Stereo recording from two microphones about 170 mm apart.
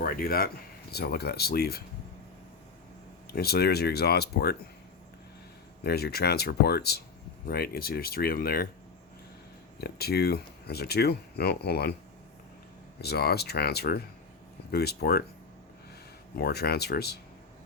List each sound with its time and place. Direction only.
0.0 s speech: 60° left (ahead or behind)
3.3 s speech: 70° left (ahead or behind)
5.8 s speech: 70° left (ahead or behind)
9.8 s speech: 70° left (ahead or behind)
13.0 s speech: 70° left (ahead or behind)
16.4 s speech: 70° left (ahead or behind)